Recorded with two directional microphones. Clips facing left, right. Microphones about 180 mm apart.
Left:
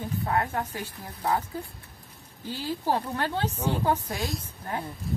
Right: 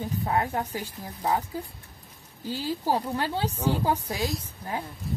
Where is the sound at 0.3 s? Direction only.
20° right (ahead or behind).